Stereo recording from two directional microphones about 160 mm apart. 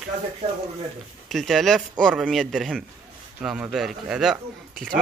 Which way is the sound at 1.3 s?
Centre (ahead or behind).